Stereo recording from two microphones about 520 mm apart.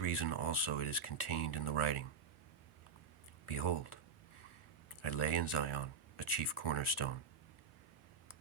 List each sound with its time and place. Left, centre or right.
0.0 s speech: left
3.4 s speech: left
5.0 s speech: left